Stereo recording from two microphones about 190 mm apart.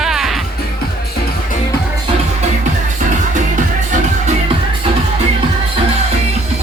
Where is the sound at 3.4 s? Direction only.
40° right (ahead or behind).